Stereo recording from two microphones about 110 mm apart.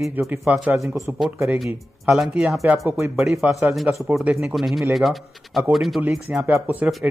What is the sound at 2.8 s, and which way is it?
Speech, 25° right (ahead or behind).